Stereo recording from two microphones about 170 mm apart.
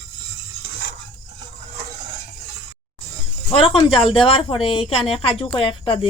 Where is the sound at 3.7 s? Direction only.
30° left (ahead or behind).